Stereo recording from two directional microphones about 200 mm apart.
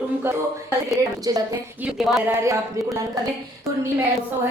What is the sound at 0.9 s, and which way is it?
A woman's voice, 15° right (ahead or behind).